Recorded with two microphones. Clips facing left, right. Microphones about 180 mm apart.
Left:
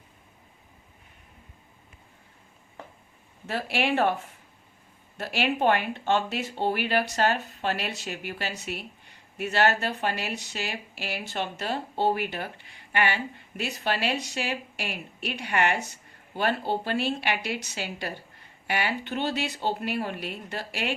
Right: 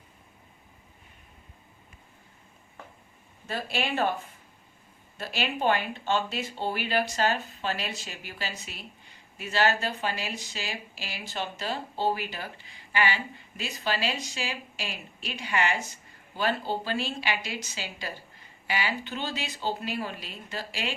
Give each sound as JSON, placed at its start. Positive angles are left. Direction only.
{"t": 3.4, "sound": "speech", "side_deg": 70}
{"t": 5.1, "sound": "speech", "side_deg": 65}